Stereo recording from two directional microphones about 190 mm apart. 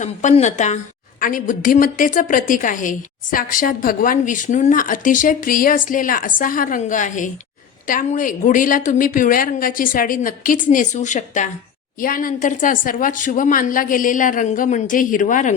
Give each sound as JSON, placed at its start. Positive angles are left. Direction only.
{"t": 0.0, "sound": "a woman's voice", "side_deg": 40}